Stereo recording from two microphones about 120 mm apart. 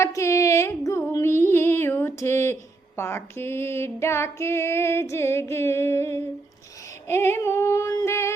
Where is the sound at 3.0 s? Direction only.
20° left (ahead or behind).